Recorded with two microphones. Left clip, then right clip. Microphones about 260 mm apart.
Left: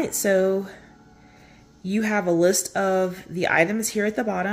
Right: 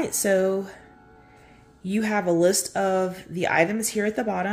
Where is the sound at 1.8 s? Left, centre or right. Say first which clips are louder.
Left 1 dB; centre.